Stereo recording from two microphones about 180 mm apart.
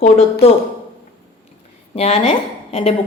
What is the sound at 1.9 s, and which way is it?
A woman's voice, 35° left (ahead or behind).